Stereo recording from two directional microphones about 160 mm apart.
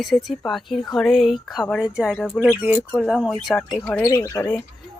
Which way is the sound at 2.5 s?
10° right (ahead or behind).